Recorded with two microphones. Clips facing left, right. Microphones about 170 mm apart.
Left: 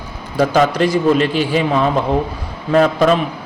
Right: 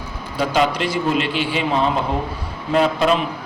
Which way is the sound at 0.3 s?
45° left (ahead or behind).